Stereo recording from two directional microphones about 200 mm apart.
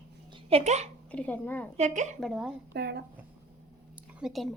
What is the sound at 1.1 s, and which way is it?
Speech, 5° left (ahead or behind).